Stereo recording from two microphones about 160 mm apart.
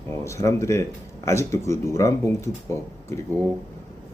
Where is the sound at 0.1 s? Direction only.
20° left (ahead or behind).